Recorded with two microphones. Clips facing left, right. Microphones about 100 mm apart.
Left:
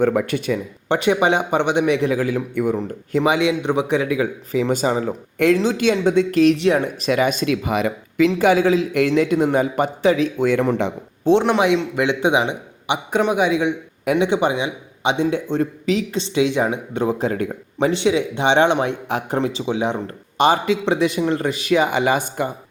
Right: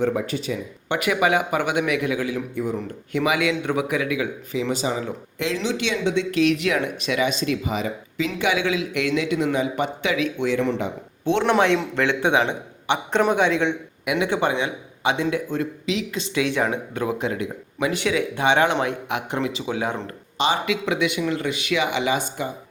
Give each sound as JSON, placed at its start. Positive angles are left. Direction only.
{"t": 0.0, "sound": "speech", "side_deg": 60}
{"t": 0.9, "sound": "speech", "side_deg": 30}
{"t": 8.4, "sound": "a man's voice", "side_deg": 40}
{"t": 10.4, "sound": "a man's voice", "side_deg": 50}
{"t": 11.4, "sound": "a man's voice", "side_deg": 10}
{"t": 17.9, "sound": "speech", "side_deg": 25}
{"t": 20.7, "sound": "speech", "side_deg": 30}